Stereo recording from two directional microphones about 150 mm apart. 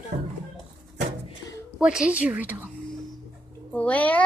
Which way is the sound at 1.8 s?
5° right (ahead or behind).